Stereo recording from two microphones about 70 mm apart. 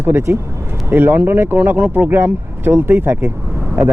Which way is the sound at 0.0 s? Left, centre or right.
Right.